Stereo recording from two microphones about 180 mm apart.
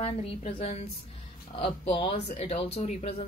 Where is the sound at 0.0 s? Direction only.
35° left (ahead or behind).